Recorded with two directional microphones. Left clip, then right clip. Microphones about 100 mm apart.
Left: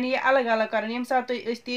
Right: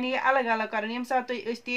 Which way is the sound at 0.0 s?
15° right (ahead or behind).